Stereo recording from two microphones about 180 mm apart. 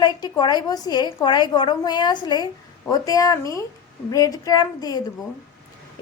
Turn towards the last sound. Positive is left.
turn(degrees=20)  # may be behind; listen again after turning